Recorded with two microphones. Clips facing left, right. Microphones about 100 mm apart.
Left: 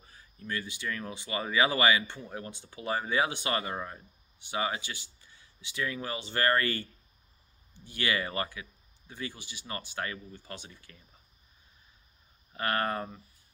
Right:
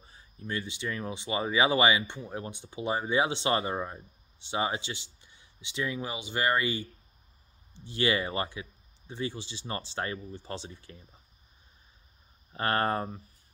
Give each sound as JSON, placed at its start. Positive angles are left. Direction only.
{"t": 0.0, "sound": "speech", "side_deg": -25}
{"t": 7.8, "sound": "speech", "side_deg": -25}
{"t": 12.5, "sound": "speech", "side_deg": -30}